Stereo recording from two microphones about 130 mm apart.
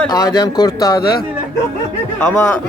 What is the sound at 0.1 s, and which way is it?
Speech, 30° left (ahead or behind).